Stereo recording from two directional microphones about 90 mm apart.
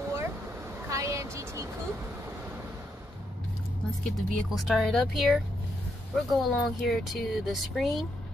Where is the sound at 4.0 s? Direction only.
Centre (ahead or behind).